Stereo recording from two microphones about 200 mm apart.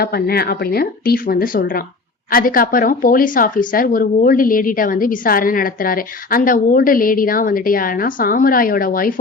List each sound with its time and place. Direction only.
0.0 s speech: 50° left (ahead or behind)